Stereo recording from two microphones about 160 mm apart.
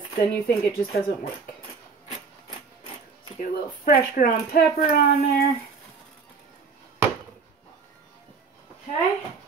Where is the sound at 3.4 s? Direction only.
60° left (ahead or behind).